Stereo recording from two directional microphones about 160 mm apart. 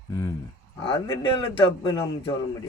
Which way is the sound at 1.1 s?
25° left (ahead or behind).